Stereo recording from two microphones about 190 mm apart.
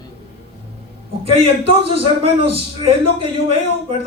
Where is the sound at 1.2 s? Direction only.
30° right (ahead or behind).